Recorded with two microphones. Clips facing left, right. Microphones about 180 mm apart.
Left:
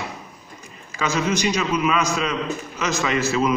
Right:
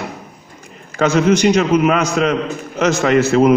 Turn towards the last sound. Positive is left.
turn(degrees=-60)  # may be behind; listen again after turning